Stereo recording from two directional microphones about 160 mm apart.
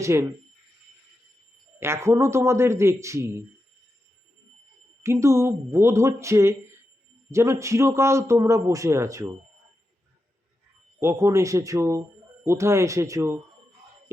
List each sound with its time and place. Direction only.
0.0 s a man's voice: 15° right (ahead or behind)
1.8 s a man's voice: 15° right (ahead or behind)
5.0 s a man's voice: 20° right (ahead or behind)
11.0 s a man's voice: 15° right (ahead or behind)